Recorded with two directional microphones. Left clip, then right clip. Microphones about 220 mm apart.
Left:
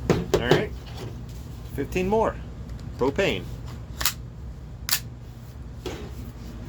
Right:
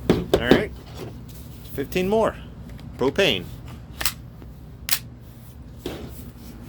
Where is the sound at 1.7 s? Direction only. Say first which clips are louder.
Right 2 dB; 45° right (ahead or behind).